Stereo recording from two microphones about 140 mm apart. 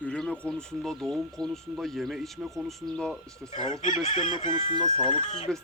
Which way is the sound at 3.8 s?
55° left (ahead or behind).